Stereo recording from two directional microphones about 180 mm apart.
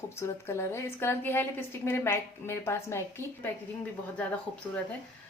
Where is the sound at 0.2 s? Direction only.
15° left (ahead or behind).